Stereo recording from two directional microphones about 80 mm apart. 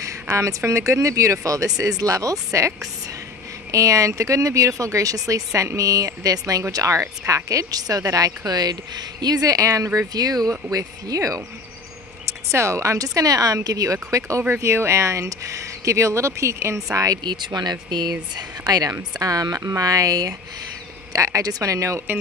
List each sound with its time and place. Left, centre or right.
0.0 s speech: right
3.7 s speech: right
17.2 s speech: right
18.6 s speech: right